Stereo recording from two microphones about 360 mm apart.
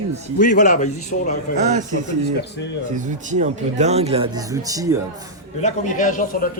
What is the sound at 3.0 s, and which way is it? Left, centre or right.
Speech, right.